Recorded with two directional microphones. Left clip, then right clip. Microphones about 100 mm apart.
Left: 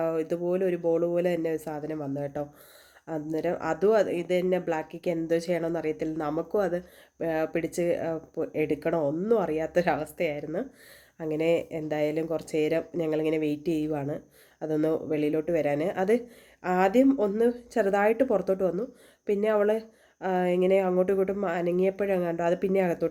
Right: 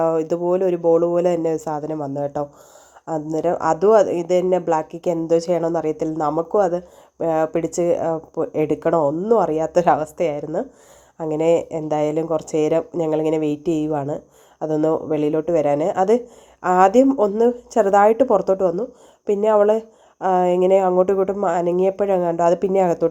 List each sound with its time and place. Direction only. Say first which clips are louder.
0.0 s speech: right 9 dB; 25° right (ahead or behind)
3.3 s speech: right 10 dB; 25° right (ahead or behind)
9.0 s speech: right 9 dB; 15° right (ahead or behind)
11.2 s speech: right 8 dB; 15° right (ahead or behind)
16.6 s speech: right 9 dB; 30° right (ahead or behind)